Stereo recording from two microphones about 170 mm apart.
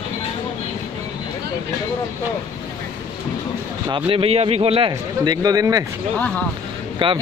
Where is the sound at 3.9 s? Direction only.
35° right (ahead or behind).